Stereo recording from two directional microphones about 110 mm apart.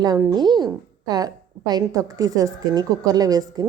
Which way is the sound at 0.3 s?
40° right (ahead or behind).